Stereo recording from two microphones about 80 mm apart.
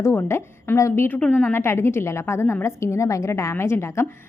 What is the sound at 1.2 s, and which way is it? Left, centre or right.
Speech, centre.